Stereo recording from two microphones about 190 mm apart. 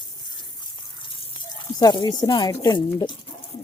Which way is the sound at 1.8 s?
20° left (ahead or behind).